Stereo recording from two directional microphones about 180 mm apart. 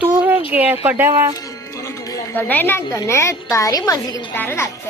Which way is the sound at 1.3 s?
20° left (ahead or behind).